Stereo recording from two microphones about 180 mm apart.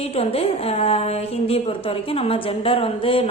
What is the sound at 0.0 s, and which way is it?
Speech, 35° left (ahead or behind).